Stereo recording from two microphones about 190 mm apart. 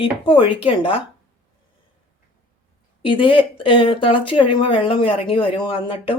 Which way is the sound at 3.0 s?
25° left (ahead or behind).